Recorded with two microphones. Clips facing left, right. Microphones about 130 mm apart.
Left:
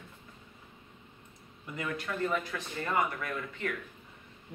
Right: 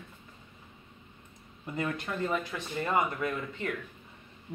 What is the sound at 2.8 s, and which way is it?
Speech, 20° right (ahead or behind).